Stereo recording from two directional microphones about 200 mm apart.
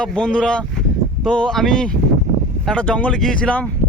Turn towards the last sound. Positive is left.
turn(degrees=5)  # may be behind; listen again after turning